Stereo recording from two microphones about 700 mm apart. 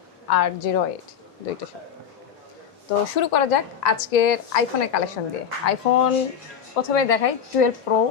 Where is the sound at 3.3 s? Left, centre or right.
Left.